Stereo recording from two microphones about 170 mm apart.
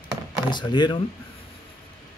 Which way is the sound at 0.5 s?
25° left (ahead or behind).